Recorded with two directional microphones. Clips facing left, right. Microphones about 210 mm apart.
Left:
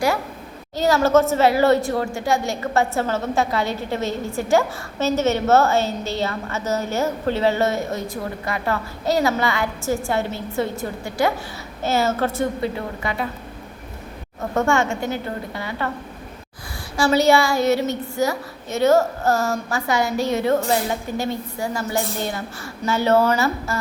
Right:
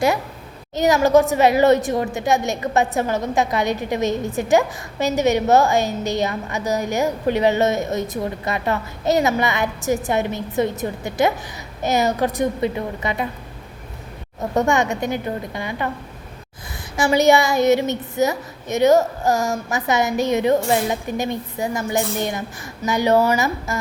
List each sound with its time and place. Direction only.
0.8 s a woman's voice: 15° right (ahead or behind)
14.5 s a woman's voice: 20° right (ahead or behind)
17.0 s a woman's voice: 20° right (ahead or behind)